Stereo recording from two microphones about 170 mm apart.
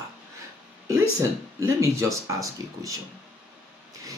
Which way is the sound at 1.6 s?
15° right (ahead or behind).